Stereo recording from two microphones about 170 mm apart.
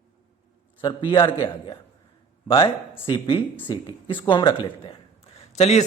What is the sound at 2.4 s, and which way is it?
A man's voice, 30° left (ahead or behind).